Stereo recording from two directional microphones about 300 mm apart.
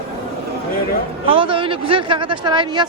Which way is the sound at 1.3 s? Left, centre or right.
Centre.